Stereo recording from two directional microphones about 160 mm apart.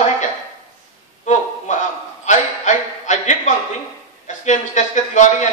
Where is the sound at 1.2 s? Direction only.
50° left (ahead or behind).